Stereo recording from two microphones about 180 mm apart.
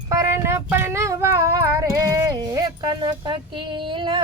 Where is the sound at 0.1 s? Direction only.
15° right (ahead or behind).